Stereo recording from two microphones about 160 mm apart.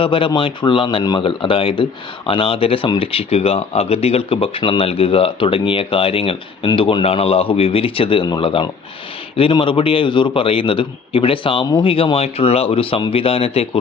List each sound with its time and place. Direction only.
0.0 s speech: 30° left (ahead or behind)